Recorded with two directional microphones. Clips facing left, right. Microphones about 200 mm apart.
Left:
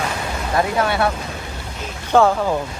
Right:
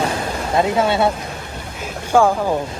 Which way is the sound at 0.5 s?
25° right (ahead or behind).